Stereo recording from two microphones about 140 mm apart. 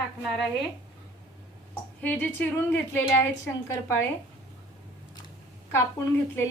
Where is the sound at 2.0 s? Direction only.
15° left (ahead or behind).